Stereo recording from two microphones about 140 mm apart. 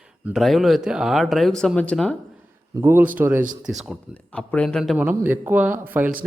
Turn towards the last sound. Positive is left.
turn(degrees=-15)  # may be behind; listen again after turning